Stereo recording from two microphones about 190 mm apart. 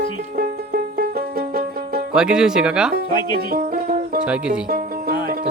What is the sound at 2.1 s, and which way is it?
Speech, 5° right (ahead or behind).